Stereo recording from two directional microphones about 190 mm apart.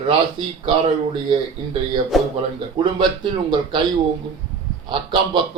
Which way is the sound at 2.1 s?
Centre (ahead or behind).